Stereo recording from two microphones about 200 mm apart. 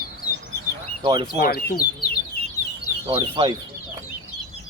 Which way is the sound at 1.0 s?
20° right (ahead or behind).